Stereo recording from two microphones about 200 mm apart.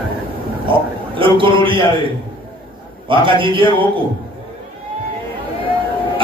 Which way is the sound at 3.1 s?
25° right (ahead or behind).